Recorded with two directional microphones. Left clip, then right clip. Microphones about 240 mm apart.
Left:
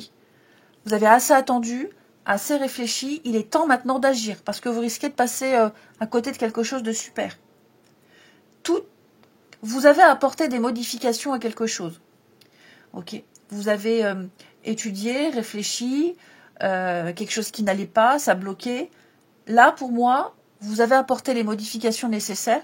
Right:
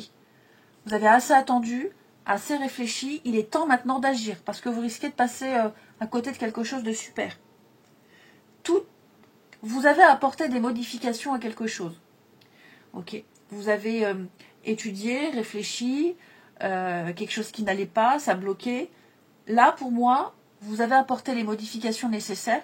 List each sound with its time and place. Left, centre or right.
0.8 s a woman's voice: left
9.5 s a woman's voice: left
13.5 s a woman's voice: left